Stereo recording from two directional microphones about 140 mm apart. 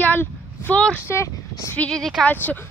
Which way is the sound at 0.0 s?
10° left (ahead or behind).